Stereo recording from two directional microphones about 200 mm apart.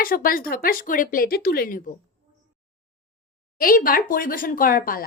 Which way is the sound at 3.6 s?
45° left (ahead or behind).